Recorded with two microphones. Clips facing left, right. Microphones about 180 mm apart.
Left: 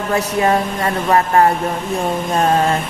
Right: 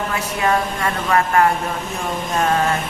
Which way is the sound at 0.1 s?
35° left (ahead or behind).